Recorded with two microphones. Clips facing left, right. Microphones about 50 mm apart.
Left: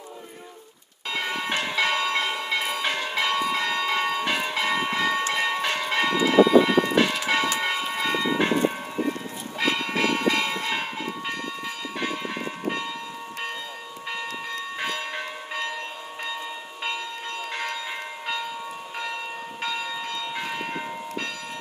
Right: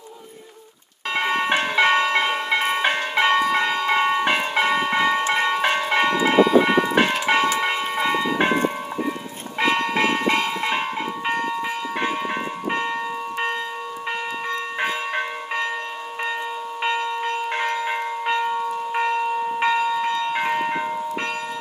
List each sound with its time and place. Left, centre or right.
1.1 s ice cream truck: right
2.3 s change ringing: right
5.3 s church bell: right
9.6 s a sound: right
11.3 s ice cream truck: right
14.5 s ice cream truck: right
16.8 s church bell: right
20.5 s change ringing: right